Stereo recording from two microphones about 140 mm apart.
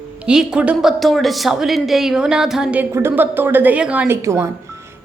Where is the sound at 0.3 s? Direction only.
5° right (ahead or behind).